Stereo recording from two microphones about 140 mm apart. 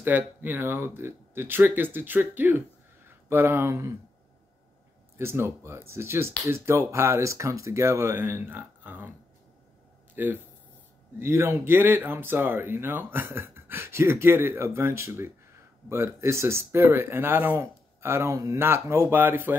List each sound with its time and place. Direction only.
0.0 s speech: 15° right (ahead or behind)
5.1 s speech: 20° right (ahead or behind)
10.1 s speech: 15° right (ahead or behind)